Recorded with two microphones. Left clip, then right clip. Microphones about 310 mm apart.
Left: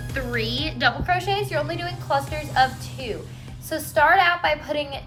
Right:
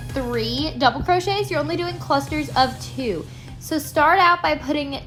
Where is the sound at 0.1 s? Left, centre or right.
Centre.